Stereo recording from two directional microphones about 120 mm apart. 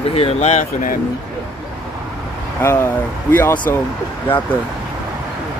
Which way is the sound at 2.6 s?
15° left (ahead or behind).